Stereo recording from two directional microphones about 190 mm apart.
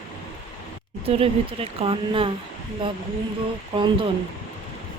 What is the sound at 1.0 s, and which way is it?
A woman's voice, 30° right (ahead or behind).